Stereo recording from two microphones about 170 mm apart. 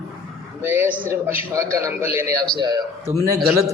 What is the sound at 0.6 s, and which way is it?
A man's voice, 15° right (ahead or behind).